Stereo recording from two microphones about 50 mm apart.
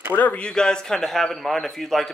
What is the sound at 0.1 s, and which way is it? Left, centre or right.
Speech, left.